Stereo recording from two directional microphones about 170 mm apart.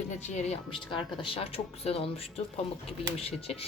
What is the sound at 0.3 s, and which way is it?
A woman's voice, 35° left (ahead or behind).